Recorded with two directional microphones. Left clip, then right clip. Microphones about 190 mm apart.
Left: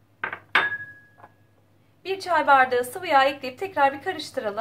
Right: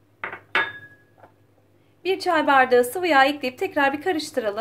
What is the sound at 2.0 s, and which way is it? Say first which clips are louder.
A woman's voice: even; 45° right (ahead or behind).